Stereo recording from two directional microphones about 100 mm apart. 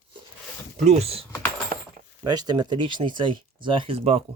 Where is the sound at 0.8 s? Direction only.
90° right.